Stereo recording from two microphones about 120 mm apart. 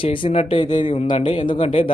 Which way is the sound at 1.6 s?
55° left (ahead or behind).